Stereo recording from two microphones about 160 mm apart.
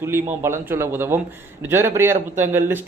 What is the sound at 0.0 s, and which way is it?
Speech, 15° right (ahead or behind).